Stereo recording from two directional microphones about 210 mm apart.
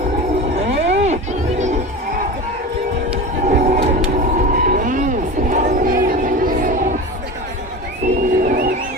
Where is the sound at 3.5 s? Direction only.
35° right (ahead or behind).